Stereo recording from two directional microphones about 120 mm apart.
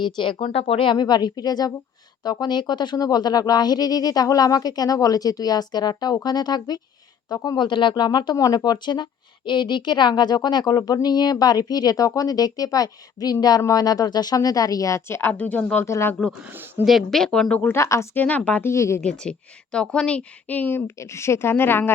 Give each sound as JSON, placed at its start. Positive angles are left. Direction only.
{"t": 0.0, "sound": "a woman's voice", "side_deg": 45}
{"t": 16.4, "sound": "speech", "side_deg": -15}
{"t": 16.8, "sound": "speech", "side_deg": 0}
{"t": 17.6, "sound": "speech", "side_deg": 20}
{"t": 18.7, "sound": "a woman's voice", "side_deg": 25}
{"t": 19.2, "sound": "speech", "side_deg": 10}